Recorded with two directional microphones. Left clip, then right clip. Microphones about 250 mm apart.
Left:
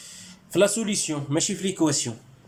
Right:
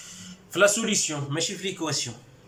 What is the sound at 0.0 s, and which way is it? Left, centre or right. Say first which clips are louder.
Speech: right 1 dB; centre.